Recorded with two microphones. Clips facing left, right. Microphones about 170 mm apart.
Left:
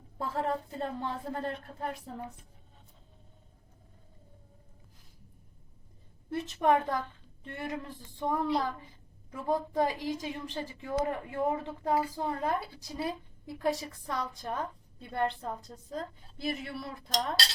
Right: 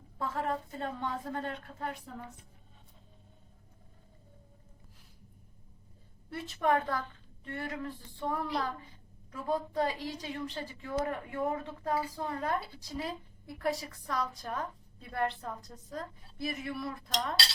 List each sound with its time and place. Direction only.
0.2 s a woman's voice: 30° left (ahead or behind)
6.3 s a woman's voice: 20° left (ahead or behind)